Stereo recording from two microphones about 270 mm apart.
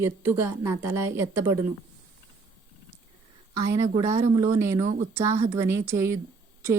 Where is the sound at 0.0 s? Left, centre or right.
Centre.